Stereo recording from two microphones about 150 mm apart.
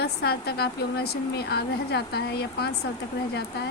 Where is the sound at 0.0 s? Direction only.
90° left.